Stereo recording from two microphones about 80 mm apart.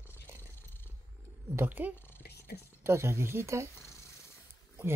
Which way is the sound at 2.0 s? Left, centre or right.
Left.